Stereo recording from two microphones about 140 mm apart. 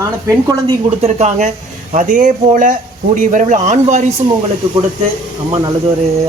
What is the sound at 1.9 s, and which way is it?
Speech, 65° right (ahead or behind).